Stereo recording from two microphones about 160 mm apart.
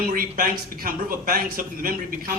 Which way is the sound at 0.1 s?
60° right (ahead or behind).